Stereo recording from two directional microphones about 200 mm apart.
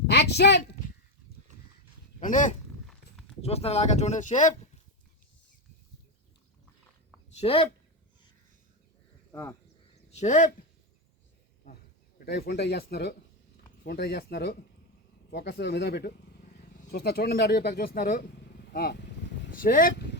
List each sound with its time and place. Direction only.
0.1 s a sound: 55° left (ahead or behind)
2.2 s speech: 40° left (ahead or behind)
2.8 s walk: 5° left (ahead or behind)
3.4 s speech: 30° left (ahead or behind)
7.3 s a woman's voice: 30° left (ahead or behind)
9.3 s speech: 10° left (ahead or behind)
10.1 s speech: 35° left (ahead or behind)
12.2 s speech: 50° left (ahead or behind)